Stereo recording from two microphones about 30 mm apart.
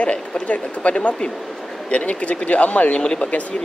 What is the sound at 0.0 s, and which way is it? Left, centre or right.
Speech, left.